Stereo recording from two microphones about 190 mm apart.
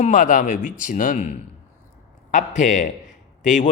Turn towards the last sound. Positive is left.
turn(degrees=40)  # may be behind; listen again after turning